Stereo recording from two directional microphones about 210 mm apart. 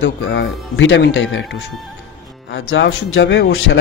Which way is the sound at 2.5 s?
65° left (ahead or behind).